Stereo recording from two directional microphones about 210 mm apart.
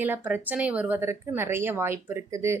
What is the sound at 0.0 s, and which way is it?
Speech, 10° right (ahead or behind).